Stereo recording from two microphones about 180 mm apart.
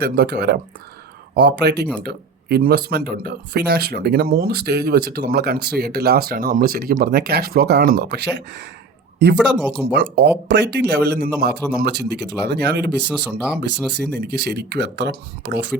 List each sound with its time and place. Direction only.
0.0 s speech: 65° right (ahead or behind)